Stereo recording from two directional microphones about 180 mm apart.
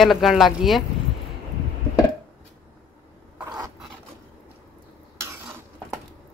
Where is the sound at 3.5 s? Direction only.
20° right (ahead or behind).